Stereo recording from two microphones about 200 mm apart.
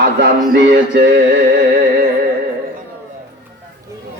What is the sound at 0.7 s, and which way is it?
Music, 50° right (ahead or behind).